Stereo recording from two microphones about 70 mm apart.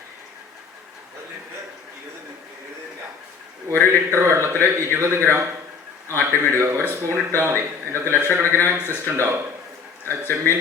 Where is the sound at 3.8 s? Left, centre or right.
Right.